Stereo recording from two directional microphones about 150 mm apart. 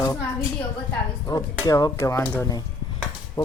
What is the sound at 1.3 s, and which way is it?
Speech, 25° left (ahead or behind).